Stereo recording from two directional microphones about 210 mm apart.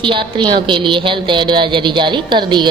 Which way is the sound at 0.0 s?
25° right (ahead or behind).